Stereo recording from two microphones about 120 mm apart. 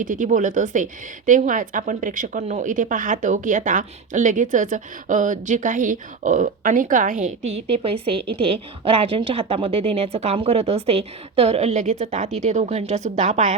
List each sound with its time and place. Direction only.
0.0 s a woman's voice: 90° right